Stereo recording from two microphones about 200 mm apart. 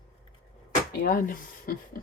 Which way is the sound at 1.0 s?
45° left (ahead or behind).